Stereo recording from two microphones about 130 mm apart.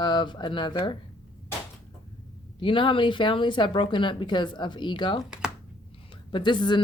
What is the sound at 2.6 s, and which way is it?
A woman's voice, 40° left (ahead or behind).